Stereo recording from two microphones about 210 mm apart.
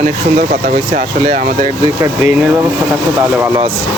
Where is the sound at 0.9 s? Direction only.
35° right (ahead or behind).